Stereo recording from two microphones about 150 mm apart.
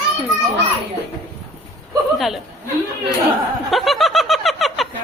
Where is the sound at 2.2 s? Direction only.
Centre (ahead or behind).